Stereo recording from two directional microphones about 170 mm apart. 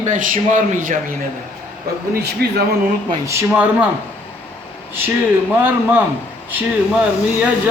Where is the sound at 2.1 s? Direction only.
70° right (ahead or behind).